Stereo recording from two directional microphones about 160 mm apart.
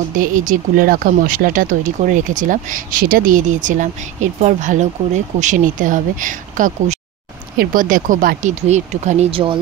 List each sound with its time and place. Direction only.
0.1 s speech: 55° right (ahead or behind); by 9.6 s 35° right (ahead or behind)